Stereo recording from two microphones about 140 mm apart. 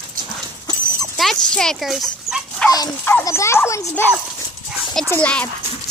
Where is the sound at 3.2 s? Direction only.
20° left (ahead or behind).